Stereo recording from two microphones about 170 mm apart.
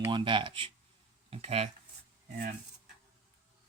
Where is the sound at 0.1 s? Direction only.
30° right (ahead or behind).